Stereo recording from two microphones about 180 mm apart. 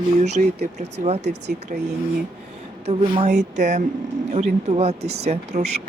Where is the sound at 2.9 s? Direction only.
40° right (ahead or behind).